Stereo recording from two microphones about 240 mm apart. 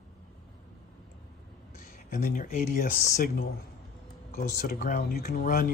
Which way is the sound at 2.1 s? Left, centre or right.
Left.